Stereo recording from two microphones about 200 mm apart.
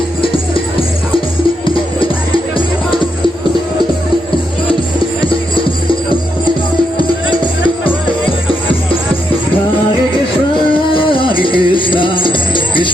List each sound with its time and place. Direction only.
1.6 s music: 25° left (ahead or behind)
10.9 s music: 25° left (ahead or behind)